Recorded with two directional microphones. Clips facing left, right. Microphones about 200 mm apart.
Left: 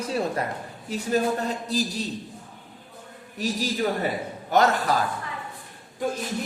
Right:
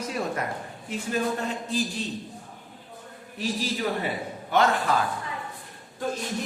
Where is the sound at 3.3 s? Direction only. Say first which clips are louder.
Left 2 dB; 40° left (ahead or behind).